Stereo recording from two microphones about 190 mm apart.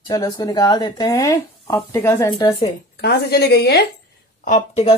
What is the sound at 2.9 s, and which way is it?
Speech, 60° left (ahead or behind).